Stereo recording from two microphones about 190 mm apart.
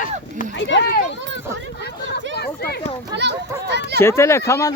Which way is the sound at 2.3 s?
55° left (ahead or behind).